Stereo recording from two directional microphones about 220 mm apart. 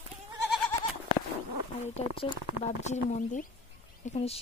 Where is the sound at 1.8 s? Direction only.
30° left (ahead or behind).